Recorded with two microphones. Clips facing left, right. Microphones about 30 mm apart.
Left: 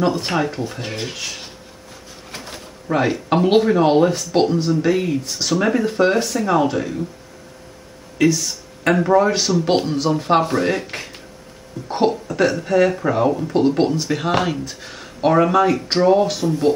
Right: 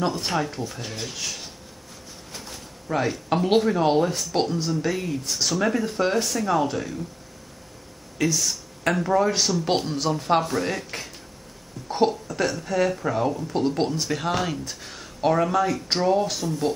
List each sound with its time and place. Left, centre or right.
0.0 s speech: left
2.3 s a sound: left
2.9 s speech: left
5.2 s speech: centre
8.8 s speech: left